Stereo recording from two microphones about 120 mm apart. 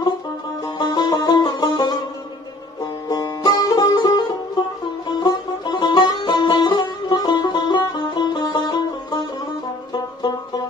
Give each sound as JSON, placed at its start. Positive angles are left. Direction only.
{"t": 0.7, "sound": "music", "side_deg": 40}